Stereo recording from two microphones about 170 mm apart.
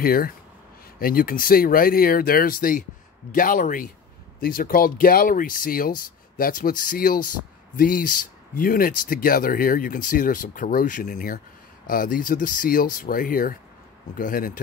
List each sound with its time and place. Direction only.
0.0 s speech: 60° left (ahead or behind)